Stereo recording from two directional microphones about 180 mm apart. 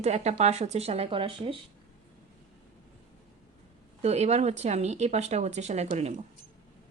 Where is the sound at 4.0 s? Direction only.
35° right (ahead or behind).